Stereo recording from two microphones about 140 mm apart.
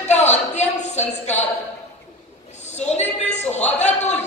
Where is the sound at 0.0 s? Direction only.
55° left (ahead or behind).